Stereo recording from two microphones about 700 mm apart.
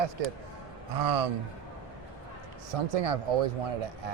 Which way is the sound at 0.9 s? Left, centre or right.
Right.